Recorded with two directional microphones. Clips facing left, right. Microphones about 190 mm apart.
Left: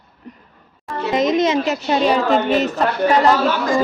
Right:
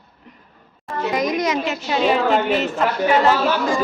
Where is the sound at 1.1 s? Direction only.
25° left (ahead or behind).